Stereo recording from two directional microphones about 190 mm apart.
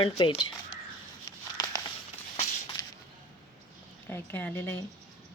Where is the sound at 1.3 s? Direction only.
20° left (ahead or behind).